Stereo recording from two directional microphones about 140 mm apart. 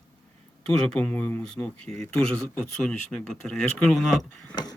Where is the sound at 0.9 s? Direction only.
10° left (ahead or behind).